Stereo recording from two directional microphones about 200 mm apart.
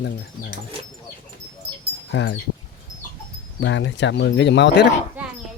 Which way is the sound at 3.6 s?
65° left (ahead or behind).